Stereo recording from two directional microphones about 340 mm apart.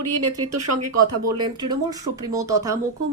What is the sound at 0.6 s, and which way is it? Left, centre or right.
Speech, right.